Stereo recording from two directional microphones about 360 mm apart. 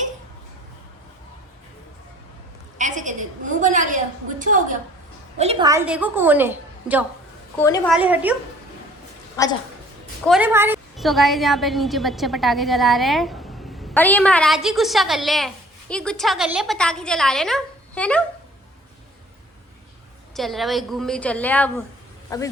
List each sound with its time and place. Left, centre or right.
2.7 s a woman's voice: right; by 7.0 s centre
7.6 s a woman's voice: centre
7.9 s a woman's voice: centre
9.3 s a woman's voice: centre
10.2 s a woman's voice: centre
20.3 s a woman's voice: centre